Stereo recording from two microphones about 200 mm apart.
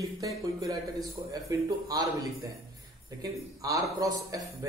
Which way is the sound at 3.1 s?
20° right (ahead or behind).